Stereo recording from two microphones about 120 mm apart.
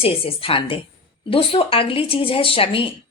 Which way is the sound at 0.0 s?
50° left (ahead or behind).